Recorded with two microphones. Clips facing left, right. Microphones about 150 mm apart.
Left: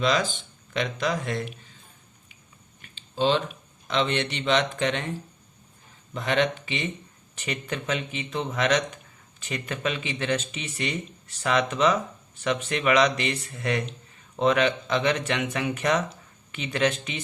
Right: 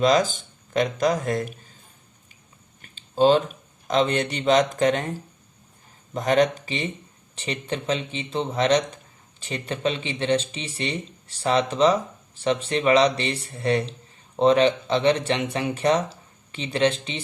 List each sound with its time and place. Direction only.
0.0 s speech: 45° right (ahead or behind)
2.8 s speech: 45° right (ahead or behind)